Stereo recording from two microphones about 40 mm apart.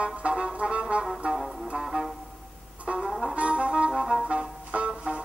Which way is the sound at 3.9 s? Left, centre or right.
Centre.